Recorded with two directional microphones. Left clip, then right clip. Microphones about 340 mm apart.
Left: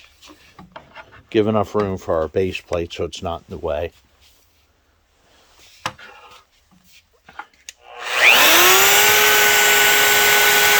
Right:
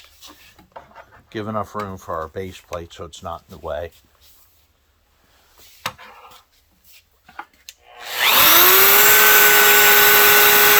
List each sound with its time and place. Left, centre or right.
1.3 s speech: left
7.3 s livestock: centre
8.4 s a sound: centre